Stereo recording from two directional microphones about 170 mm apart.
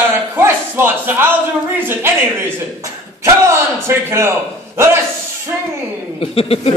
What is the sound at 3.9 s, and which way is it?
Speech, 15° right (ahead or behind).